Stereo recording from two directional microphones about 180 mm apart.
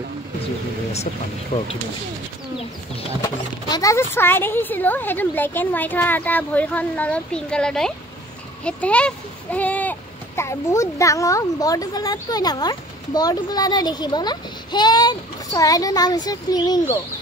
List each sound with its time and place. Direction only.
1.5 s speech: 35° left (ahead or behind)
3.2 s a child's voice: 20° left (ahead or behind)